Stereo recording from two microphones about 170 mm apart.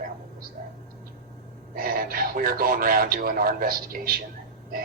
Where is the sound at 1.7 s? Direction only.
60° right (ahead or behind).